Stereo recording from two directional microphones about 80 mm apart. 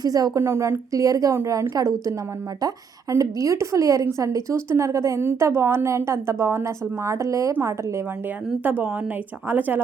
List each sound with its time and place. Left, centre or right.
0.0 s a woman's voice: right
0.3 s a woman's voice: right
8.6 s speech: right